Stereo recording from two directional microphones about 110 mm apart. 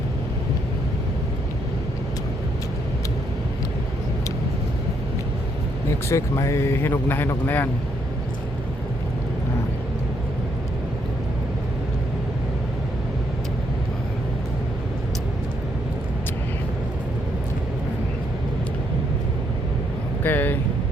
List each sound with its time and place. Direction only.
6.1 s speech: 25° left (ahead or behind)
20.2 s vehicle: 15° left (ahead or behind)